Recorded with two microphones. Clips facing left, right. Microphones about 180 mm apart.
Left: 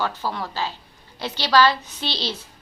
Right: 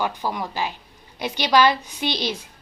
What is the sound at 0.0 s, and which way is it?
A woman's voice, 15° right (ahead or behind).